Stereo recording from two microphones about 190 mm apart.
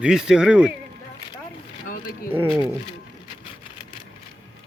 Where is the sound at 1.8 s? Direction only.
50° left (ahead or behind).